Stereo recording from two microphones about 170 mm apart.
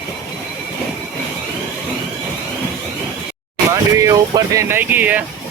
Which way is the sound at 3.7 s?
20° right (ahead or behind).